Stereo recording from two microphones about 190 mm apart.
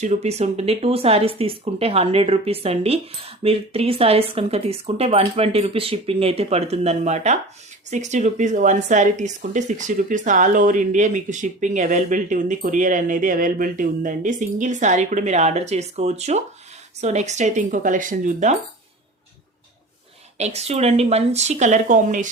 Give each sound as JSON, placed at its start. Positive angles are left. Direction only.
{"t": 0.0, "sound": "a woman's voice", "side_deg": -35}
{"t": 20.4, "sound": "a woman's voice", "side_deg": -35}